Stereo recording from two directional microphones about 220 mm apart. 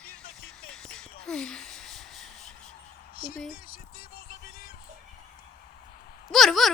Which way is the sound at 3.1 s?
40° left (ahead or behind).